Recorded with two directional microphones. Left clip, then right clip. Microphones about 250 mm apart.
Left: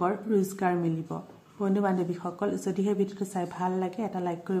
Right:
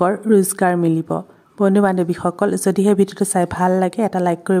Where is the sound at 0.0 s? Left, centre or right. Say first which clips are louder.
Right 12 dB; right.